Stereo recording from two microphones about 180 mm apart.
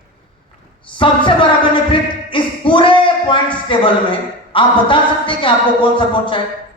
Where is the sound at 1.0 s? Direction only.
25° left (ahead or behind).